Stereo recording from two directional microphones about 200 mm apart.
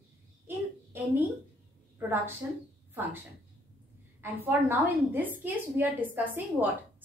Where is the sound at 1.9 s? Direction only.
10° right (ahead or behind).